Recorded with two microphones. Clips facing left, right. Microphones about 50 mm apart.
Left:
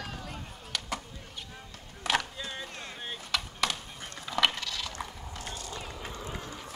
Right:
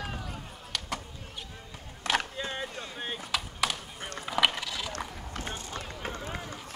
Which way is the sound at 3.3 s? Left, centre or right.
Centre.